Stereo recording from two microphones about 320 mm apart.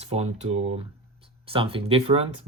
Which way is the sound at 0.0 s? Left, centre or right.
Centre.